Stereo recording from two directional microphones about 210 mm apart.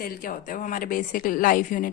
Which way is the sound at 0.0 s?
40° left (ahead or behind).